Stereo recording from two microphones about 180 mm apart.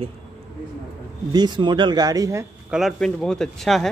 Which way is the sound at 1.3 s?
25° right (ahead or behind).